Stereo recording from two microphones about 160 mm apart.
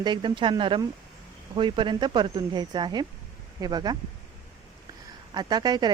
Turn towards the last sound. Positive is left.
turn(degrees=-25)  # may be behind; listen again after turning